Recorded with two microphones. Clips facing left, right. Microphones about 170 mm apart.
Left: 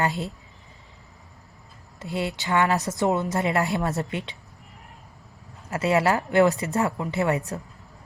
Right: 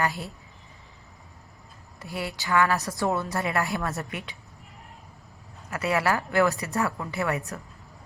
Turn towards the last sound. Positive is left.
turn(degrees=20)  # may be behind; listen again after turning